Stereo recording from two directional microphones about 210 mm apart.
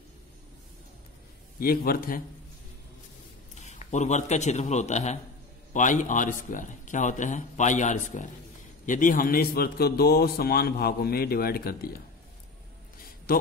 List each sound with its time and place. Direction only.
1.6 s a man's voice: 45° left (ahead or behind)
3.5 s a man's voice: 35° left (ahead or behind)